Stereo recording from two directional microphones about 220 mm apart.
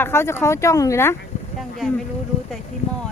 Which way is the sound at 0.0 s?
10° left (ahead or behind).